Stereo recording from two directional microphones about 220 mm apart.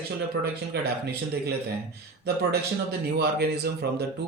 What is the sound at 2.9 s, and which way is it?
A man's voice, 45° right (ahead or behind).